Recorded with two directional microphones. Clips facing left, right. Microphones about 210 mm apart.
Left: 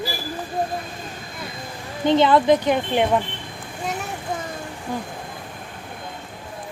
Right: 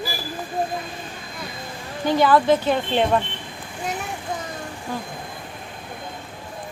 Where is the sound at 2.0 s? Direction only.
25° left (ahead or behind).